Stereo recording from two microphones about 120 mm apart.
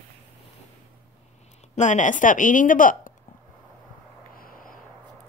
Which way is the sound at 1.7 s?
90° left.